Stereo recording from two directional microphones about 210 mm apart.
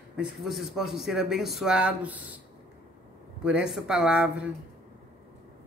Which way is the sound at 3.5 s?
5° right (ahead or behind).